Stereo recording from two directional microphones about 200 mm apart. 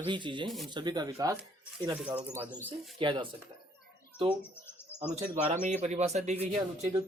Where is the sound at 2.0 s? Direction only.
5° right (ahead or behind).